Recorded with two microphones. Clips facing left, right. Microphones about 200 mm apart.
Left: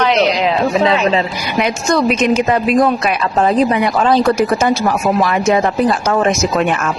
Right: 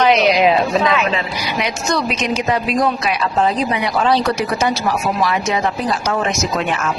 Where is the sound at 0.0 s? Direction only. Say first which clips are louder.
Right 1 dB; 10° right (ahead or behind).